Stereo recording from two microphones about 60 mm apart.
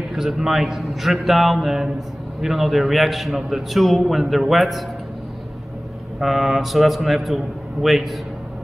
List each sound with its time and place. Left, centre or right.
0.1 s a man's voice: centre
6.1 s a man's voice: centre